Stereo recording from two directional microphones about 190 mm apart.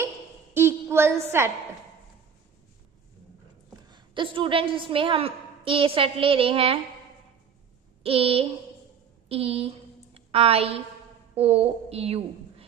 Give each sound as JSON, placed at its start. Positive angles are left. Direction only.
{"t": 0.5, "sound": "a sound", "side_deg": -15}
{"t": 3.9, "sound": "a woman's voice", "side_deg": -25}
{"t": 8.0, "sound": "a woman's voice", "side_deg": -30}